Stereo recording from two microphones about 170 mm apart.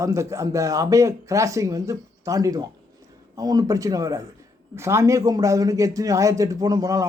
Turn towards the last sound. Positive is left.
turn(degrees=-20)  # may be behind; listen again after turning